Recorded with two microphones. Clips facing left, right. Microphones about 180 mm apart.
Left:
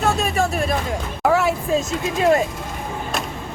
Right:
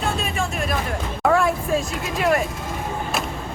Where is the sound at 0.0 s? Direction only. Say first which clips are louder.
Left 5 dB; 40° left (ahead or behind).